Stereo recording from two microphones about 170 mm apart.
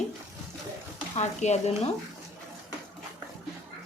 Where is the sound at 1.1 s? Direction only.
40° left (ahead or behind).